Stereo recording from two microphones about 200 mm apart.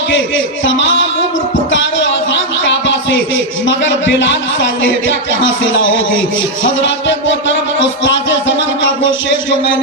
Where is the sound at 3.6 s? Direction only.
65° left (ahead or behind).